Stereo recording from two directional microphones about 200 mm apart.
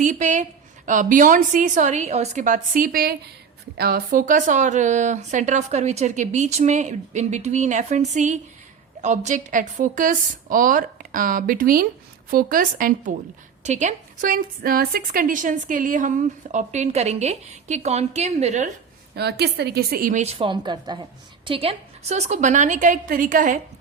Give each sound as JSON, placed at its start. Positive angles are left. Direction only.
{"t": 0.0, "sound": "a woman's voice", "side_deg": -40}
{"t": 19.1, "sound": "a woman's voice", "side_deg": -55}
{"t": 20.4, "sound": "a woman's voice", "side_deg": -25}